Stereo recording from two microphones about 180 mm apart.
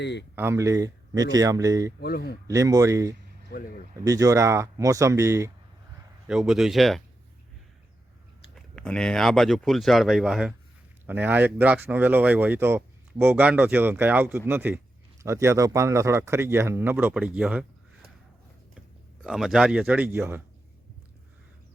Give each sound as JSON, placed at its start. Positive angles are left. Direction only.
{"t": 0.0, "sound": "speech", "side_deg": 75}
{"t": 0.3, "sound": "speech", "side_deg": -15}
{"t": 2.0, "sound": "speech", "side_deg": 60}
{"t": 2.5, "sound": "speech", "side_deg": -20}
{"t": 6.2, "sound": "speech", "side_deg": -5}
{"t": 8.5, "sound": "speech", "side_deg": 5}
{"t": 19.2, "sound": "speech", "side_deg": 0}